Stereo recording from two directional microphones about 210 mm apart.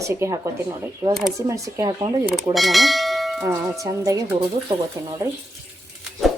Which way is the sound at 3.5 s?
15° right (ahead or behind).